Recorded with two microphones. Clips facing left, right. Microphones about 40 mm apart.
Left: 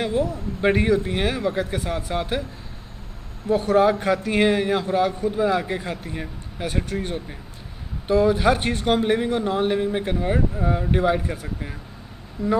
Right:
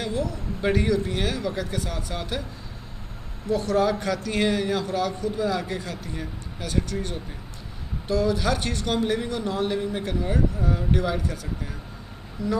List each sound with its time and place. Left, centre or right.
0.0 s a man's voice: left
3.4 s a man's voice: left